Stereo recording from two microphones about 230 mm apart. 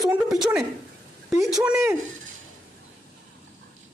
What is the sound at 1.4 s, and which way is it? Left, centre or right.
Speech, centre.